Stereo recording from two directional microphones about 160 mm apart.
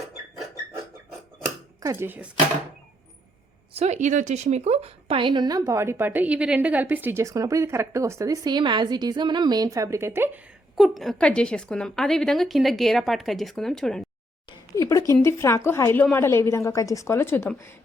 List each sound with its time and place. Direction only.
1.8 s speech: 15° right (ahead or behind)
3.8 s a woman's voice: 45° right (ahead or behind); by 10.4 s 15° right (ahead or behind)
10.8 s a woman's voice: centre (ahead or behind)
14.8 s a woman's voice: 20° left (ahead or behind)